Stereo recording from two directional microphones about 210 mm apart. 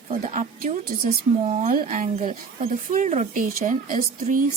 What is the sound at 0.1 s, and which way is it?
Speech, 35° right (ahead or behind).